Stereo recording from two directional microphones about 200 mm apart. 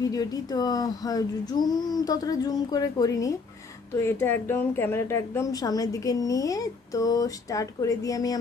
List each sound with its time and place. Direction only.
0.0 s a woman's voice: 20° left (ahead or behind)